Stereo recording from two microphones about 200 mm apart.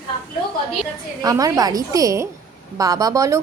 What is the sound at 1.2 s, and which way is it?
A woman's voice, 20° right (ahead or behind).